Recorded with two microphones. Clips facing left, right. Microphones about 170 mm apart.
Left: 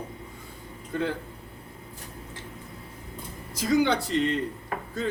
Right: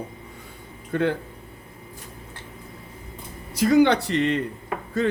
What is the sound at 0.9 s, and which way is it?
Speech, 65° right (ahead or behind).